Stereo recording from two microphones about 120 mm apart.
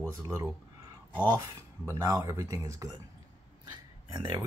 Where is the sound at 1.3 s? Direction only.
20° right (ahead or behind).